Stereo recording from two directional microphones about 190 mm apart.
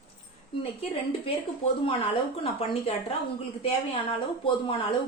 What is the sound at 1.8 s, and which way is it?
A woman's voice, 30° left (ahead or behind).